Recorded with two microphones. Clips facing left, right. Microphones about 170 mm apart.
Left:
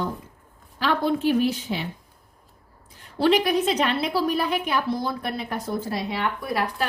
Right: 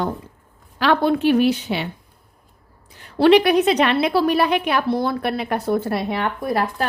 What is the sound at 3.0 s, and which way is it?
A woman's voice, 70° right (ahead or behind).